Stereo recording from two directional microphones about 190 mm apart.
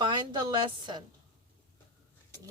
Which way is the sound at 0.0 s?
25° right (ahead or behind).